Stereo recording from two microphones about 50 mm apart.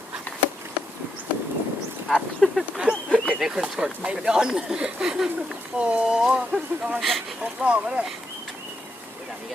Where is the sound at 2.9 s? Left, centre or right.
Left.